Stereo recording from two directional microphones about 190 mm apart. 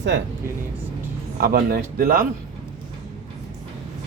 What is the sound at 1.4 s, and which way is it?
Speech, 55° right (ahead or behind).